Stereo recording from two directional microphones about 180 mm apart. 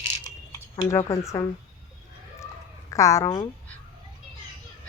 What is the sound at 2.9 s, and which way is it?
Speech, 15° left (ahead or behind).